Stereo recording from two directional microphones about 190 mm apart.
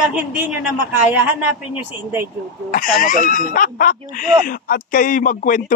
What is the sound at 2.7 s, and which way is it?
Speech, 45° left (ahead or behind).